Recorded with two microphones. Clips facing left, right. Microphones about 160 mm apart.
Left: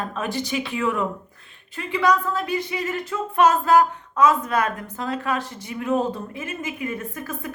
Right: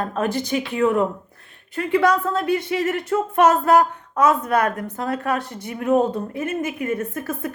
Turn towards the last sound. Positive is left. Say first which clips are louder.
# right 5 dB
turn(degrees=-60)  # may be behind; listen again after turning